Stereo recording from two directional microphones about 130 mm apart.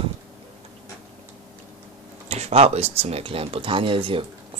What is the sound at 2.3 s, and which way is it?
Speech, 50° right (ahead or behind).